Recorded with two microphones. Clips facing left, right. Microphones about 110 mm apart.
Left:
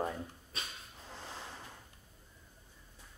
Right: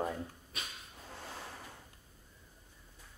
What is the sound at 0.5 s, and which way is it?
Dog, 30° left (ahead or behind).